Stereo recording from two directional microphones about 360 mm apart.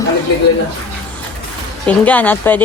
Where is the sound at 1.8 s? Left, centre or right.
Centre.